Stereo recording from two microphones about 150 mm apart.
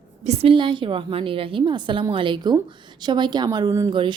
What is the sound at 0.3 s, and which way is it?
A woman's voice, 35° right (ahead or behind).